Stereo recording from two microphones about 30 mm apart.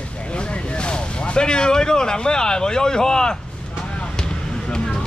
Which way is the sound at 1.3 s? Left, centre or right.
Left.